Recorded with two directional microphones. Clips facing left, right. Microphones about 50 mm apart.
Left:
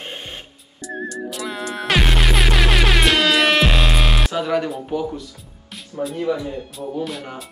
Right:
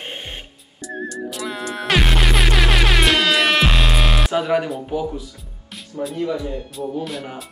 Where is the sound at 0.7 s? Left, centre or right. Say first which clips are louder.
Even; centre.